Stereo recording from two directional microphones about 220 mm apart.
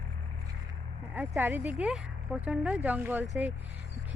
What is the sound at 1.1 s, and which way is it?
Speech, 10° right (ahead or behind).